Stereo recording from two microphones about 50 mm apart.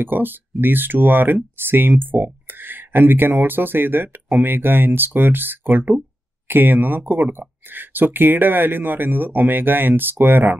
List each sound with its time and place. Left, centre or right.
0.0 s speech: right